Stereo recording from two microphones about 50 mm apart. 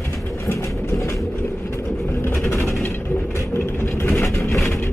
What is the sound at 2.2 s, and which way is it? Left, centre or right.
Vehicle, left.